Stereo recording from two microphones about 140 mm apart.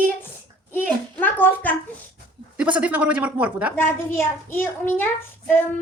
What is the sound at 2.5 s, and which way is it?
Speech, 10° right (ahead or behind).